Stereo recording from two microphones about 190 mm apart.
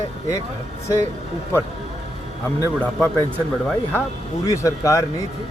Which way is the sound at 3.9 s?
10° left (ahead or behind).